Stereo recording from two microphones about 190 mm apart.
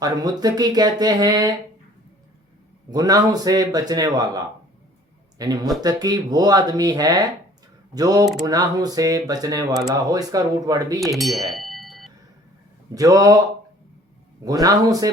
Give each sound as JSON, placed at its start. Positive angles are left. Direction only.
{"t": 0.0, "sound": "speech", "side_deg": -20}
{"t": 2.9, "sound": "speech", "side_deg": -20}
{"t": 11.0, "sound": "a sound", "side_deg": 0}
{"t": 12.9, "sound": "speech", "side_deg": -20}
{"t": 14.4, "sound": "speech", "side_deg": -20}